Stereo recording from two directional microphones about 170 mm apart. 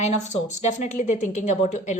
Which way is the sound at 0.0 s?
40° left (ahead or behind).